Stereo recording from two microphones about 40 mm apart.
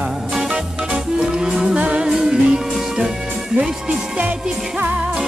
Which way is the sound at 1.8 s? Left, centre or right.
Right.